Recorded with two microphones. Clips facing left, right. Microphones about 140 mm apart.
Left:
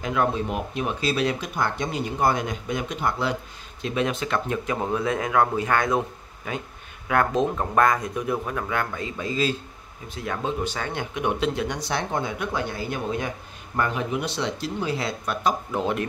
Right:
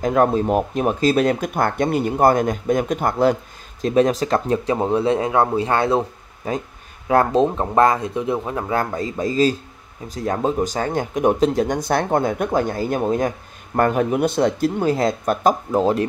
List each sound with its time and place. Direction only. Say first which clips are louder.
0.0 s speech: right 7 dB; 45° right (ahead or behind)